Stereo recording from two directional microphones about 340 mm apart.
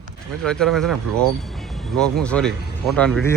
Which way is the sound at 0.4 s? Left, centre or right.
Centre.